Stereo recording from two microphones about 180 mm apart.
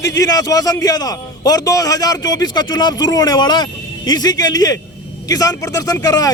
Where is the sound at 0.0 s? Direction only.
20° left (ahead or behind).